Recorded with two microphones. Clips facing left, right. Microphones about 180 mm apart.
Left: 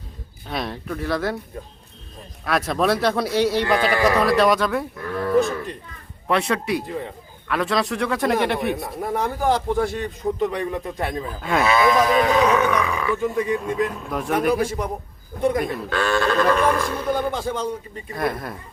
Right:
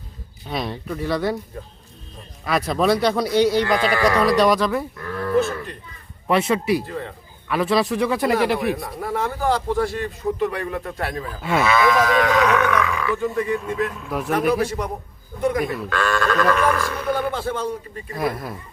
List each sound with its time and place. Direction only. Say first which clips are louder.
0.4 s speech: right 1 dB; centre (ahead or behind)
2.4 s speech: right 1 dB; centre (ahead or behind)
5.2 s goat: left 1 dB; 15° left (ahead or behind)
6.2 s speech: right 3 dB; centre (ahead or behind)
6.8 s a man's voice: left 1 dB; 15° left (ahead or behind)
7.4 s speech: right 3 dB; 5° right (ahead or behind)
9.0 s a man's voice: left 1 dB; 20° left (ahead or behind)
11.3 s speech: right 1 dB; 5° right (ahead or behind)
11.8 s speech: left 1 dB; 20° left (ahead or behind)
14.1 s speech: right 2 dB; centre (ahead or behind)
16.0 s speech: left 1 dB; 30° left (ahead or behind); by 17.7 s 15° left (ahead or behind)
18.1 s speech: even; centre (ahead or behind)